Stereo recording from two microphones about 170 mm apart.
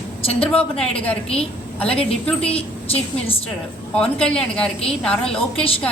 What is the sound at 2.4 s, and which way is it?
Speech, 35° left (ahead or behind).